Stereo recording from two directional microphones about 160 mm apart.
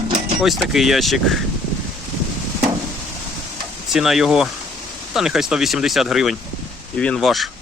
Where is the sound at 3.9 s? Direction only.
5° right (ahead or behind).